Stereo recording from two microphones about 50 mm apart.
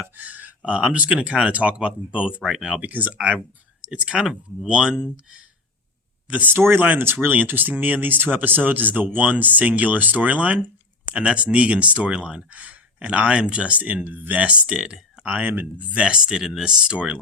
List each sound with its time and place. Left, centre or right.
0.0 s speech: right; by 2.8 s centre
2.8 s speech: right; by 5.1 s centre
6.3 s speech: right
6.6 s speech: right; by 15.4 s centre
15.4 s speech: right